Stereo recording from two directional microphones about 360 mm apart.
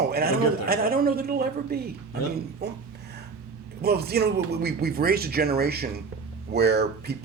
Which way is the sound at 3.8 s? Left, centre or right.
Right.